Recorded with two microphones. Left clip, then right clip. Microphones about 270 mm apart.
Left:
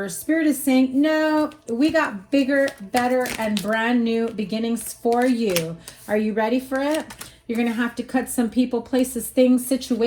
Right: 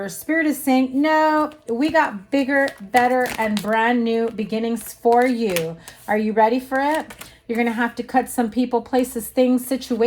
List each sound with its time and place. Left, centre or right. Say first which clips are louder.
0.0 s speech: right 1 dB; right